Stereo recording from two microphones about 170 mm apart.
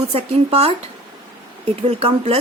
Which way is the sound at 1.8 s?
35° right (ahead or behind).